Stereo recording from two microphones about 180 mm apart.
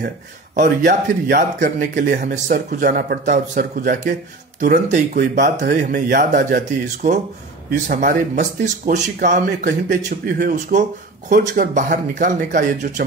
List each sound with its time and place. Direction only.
0.6 s speech: 50° right (ahead or behind)
5.1 s speech: 60° right (ahead or behind)
5.6 s speech: 45° right (ahead or behind)
10.0 s speech: 55° right (ahead or behind)